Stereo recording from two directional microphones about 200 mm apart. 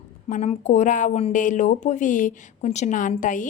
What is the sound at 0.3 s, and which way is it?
Speech, 35° left (ahead or behind).